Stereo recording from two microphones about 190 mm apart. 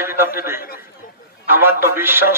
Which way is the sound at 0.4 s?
15° right (ahead or behind).